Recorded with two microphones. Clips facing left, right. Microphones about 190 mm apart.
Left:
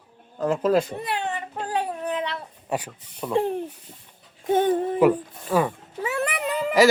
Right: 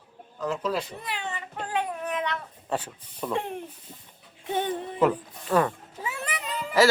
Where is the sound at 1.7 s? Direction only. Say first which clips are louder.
Left 2 dB; 35° left (ahead or behind).